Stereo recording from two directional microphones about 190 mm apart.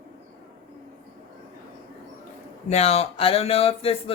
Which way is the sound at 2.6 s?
35° left (ahead or behind).